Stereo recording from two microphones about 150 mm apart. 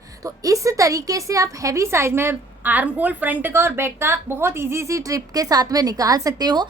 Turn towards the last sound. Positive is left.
turn(degrees=-25)  # may be behind; listen again after turning